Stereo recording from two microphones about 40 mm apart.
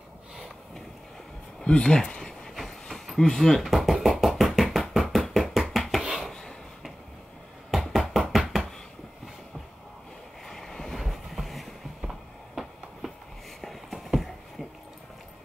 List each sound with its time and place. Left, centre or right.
1.6 s a sound: left; by 4.4 s centre
4.4 s tap: centre
4.6 s knock: centre
5.7 s hands: centre
6.0 s a sound: centre
7.7 s bouncing: centre
8.3 s knock: centre
10.4 s vehicle: centre
11.0 s train: centre
12.0 s a sound: centre
13.6 s clip-clop: centre